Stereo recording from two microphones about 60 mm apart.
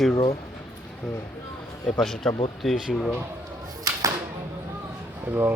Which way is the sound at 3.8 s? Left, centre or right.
Right.